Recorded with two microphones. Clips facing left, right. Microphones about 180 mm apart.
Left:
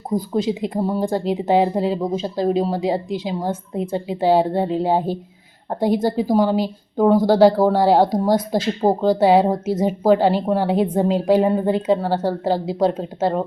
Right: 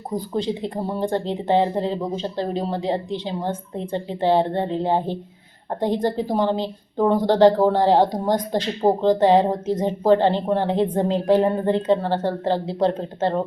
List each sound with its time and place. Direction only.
0.3 s speech: 10° left (ahead or behind)